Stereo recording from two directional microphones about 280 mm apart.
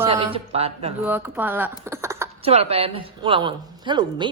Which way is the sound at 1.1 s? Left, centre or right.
Centre.